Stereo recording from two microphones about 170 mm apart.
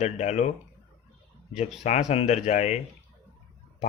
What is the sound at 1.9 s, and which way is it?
Speech, 40° left (ahead or behind).